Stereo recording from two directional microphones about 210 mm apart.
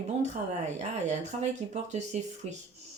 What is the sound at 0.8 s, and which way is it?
Speech, 30° right (ahead or behind).